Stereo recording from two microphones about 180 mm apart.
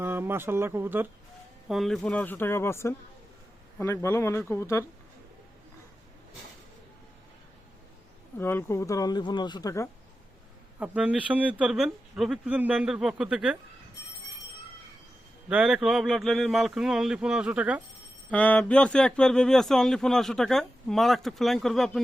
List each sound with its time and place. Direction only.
0.0 s speech: 10° right (ahead or behind)
1.6 s speech: centre (ahead or behind); by 4.9 s 15° left (ahead or behind)
8.4 s speech: 15° left (ahead or behind)
10.8 s speech: 5° right (ahead or behind)
15.4 s speech: 5° right (ahead or behind)
18.3 s speech: 10° left (ahead or behind)